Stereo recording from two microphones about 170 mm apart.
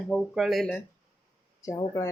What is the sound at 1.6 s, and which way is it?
Speech, 20° left (ahead or behind).